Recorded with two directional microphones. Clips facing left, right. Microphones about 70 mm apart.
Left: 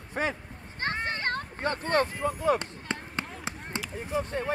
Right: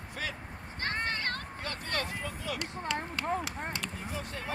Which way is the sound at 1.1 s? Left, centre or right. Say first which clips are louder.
Left 4 dB; left.